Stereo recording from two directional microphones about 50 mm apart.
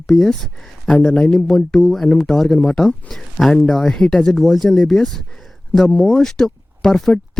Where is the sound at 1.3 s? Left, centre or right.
Centre.